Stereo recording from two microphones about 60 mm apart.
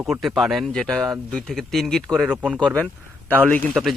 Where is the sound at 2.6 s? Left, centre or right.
Centre.